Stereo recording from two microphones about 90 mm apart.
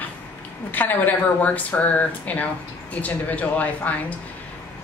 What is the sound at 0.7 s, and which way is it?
Speech, 20° left (ahead or behind).